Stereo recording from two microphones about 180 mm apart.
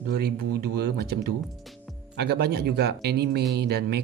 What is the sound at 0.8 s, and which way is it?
Speech, 60° right (ahead or behind).